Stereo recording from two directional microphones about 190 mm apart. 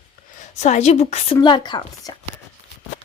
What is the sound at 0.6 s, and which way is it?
Speech, 40° left (ahead or behind).